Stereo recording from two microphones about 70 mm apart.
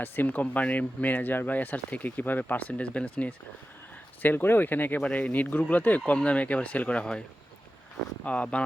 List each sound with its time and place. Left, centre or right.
0.0 s speech: left
8.2 s speech: centre